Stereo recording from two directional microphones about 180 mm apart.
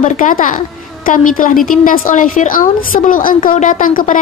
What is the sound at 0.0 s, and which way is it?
A woman's voice, 45° left (ahead or behind).